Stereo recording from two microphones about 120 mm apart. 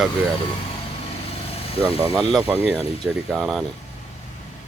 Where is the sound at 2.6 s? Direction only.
20° right (ahead or behind).